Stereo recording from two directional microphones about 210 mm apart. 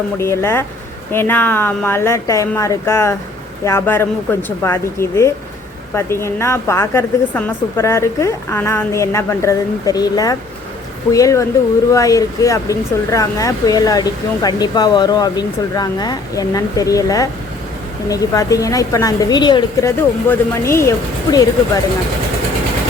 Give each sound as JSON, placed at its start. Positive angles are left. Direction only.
{"t": 0.2, "sound": "speech", "side_deg": 10}